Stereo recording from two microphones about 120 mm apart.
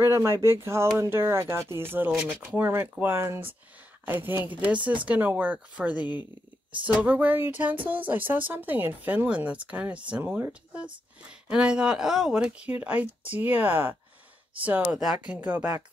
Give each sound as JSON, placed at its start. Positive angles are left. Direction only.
{"t": 0.0, "sound": "speech", "side_deg": -20}
{"t": 5.9, "sound": "speech", "side_deg": 40}
{"t": 6.9, "sound": "speech", "side_deg": -15}
{"t": 14.9, "sound": "speech", "side_deg": -5}